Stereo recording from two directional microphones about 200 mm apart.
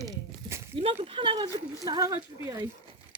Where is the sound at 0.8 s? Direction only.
30° right (ahead or behind).